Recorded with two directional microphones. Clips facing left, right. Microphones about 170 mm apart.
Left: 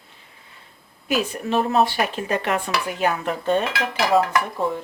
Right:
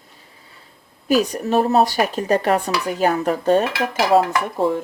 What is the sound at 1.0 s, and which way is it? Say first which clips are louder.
Dishes: right 5 dB; 40° right (ahead or behind).